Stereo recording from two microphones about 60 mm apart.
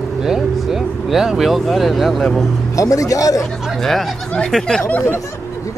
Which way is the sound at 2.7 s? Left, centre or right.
Left.